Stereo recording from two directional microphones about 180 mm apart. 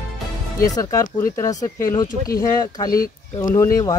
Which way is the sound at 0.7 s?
20° left (ahead or behind).